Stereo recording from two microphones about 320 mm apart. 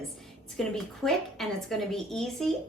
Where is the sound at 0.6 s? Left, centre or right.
Centre.